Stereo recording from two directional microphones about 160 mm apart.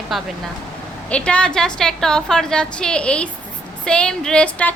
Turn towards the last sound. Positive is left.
turn(degrees=5)  # may be behind; listen again after turning